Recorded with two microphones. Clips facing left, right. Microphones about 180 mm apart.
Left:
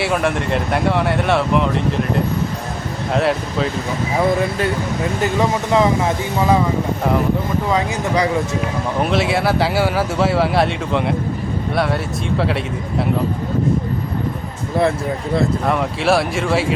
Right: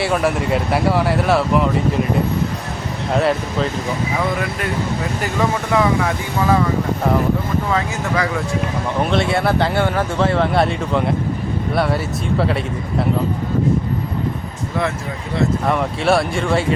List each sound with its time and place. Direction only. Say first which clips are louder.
0.0 s speech: right 1 dB; centre (ahead or behind)
3.2 s speech: even; centre (ahead or behind)
5.2 s speech: left 2 dB; 20° left (ahead or behind)
7.7 s speech: left 4 dB; 20° left (ahead or behind)
9.0 s speech: even; centre (ahead or behind)
15.6 s speech: even; centre (ahead or behind)